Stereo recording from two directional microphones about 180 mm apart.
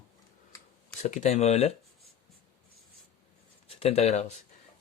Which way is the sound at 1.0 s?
40° left (ahead or behind).